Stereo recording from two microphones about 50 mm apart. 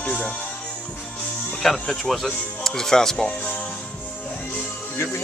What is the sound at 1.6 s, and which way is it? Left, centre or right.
Speech, centre.